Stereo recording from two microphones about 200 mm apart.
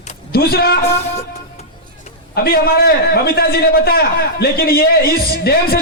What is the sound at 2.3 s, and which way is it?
A man's voice, 50° left (ahead or behind).